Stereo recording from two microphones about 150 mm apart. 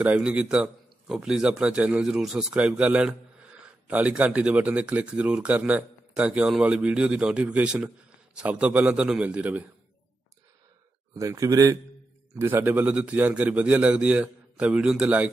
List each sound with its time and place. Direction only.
0.0 s a man's voice: 10° right (ahead or behind)
11.1 s speech: 20° right (ahead or behind)